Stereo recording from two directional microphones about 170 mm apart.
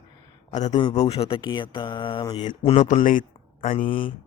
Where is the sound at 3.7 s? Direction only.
30° left (ahead or behind).